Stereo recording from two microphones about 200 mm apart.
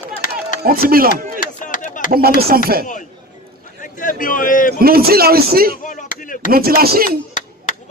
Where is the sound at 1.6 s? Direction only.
40° left (ahead or behind).